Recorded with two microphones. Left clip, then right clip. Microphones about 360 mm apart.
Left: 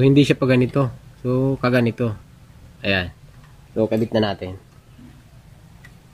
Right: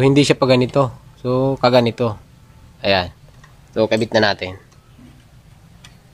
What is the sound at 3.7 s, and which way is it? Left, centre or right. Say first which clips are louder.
Speech: right 4 dB; right.